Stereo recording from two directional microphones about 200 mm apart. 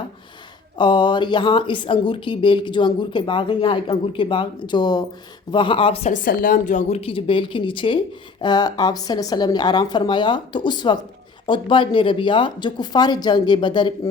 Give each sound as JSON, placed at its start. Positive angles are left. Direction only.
{"t": 0.8, "sound": "speech", "side_deg": 25}